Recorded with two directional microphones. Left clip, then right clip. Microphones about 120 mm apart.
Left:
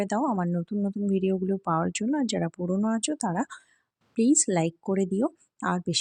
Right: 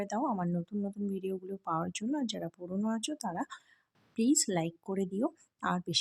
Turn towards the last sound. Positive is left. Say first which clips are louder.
# left 5 dB
turn(degrees=45)  # may be behind; listen again after turning